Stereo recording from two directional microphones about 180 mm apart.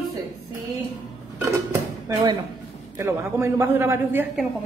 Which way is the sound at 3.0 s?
15° right (ahead or behind).